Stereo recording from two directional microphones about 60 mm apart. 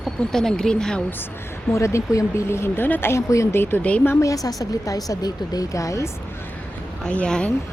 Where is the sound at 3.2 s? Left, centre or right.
Left.